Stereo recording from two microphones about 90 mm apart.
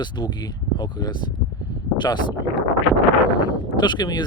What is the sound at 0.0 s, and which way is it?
Speech, 55° left (ahead or behind).